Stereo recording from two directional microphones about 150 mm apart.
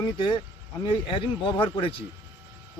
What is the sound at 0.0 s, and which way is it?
Speech, 30° left (ahead or behind).